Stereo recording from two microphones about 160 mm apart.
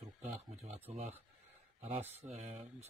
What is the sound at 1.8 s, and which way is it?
Speech, 40° right (ahead or behind).